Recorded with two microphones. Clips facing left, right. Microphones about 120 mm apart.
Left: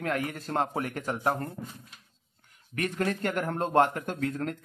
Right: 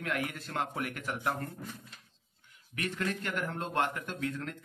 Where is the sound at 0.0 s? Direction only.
40° left (ahead or behind).